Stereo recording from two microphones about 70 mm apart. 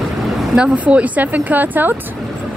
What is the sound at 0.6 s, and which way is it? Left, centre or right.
Speech, centre.